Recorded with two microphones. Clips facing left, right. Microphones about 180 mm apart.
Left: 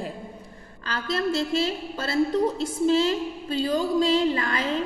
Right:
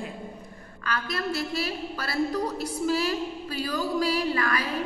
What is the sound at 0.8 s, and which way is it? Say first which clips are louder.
A woman's voice: left 4 dB; 25° left (ahead or behind).